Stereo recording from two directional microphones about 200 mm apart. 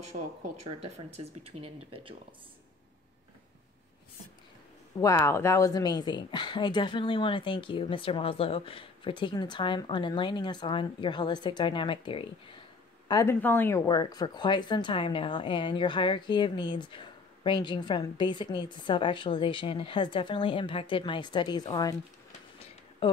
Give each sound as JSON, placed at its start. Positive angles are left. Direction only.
{"t": 0.1, "sound": "speech", "side_deg": -45}
{"t": 0.9, "sound": "speech", "side_deg": -30}
{"t": 5.0, "sound": "speech", "side_deg": 15}
{"t": 13.1, "sound": "speech", "side_deg": 15}